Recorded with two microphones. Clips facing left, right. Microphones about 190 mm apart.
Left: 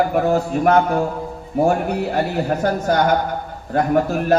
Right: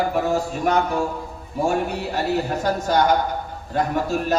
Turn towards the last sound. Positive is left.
turn(degrees=55)  # may be behind; listen again after turning